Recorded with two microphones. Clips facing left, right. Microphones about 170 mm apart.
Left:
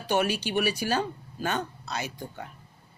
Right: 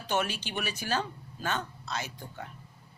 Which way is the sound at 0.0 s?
10° left (ahead or behind).